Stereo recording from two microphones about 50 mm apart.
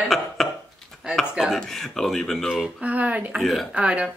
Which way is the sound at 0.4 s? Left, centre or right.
Centre.